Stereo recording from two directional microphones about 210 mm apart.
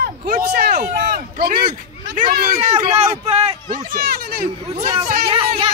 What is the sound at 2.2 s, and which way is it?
Speech, 45° right (ahead or behind).